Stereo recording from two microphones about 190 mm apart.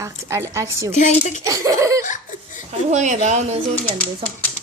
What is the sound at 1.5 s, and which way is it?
Laughter, 15° right (ahead or behind).